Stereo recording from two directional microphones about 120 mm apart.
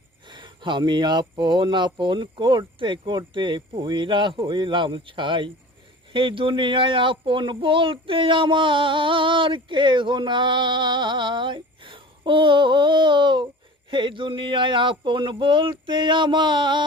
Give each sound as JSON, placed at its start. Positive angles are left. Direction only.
{"t": 0.3, "sound": "speech", "side_deg": -40}